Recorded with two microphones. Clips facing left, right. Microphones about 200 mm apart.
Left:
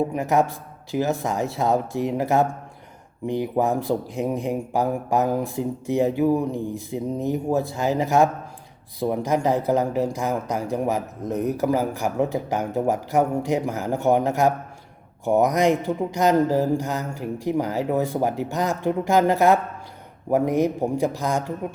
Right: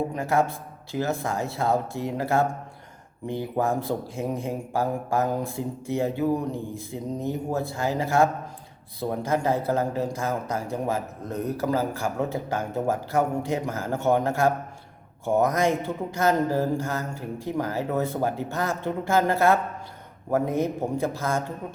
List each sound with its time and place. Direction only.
0.1 s speech: 15° left (ahead or behind)